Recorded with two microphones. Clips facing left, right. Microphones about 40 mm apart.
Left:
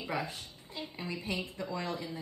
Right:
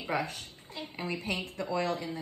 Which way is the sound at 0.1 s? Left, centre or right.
Right.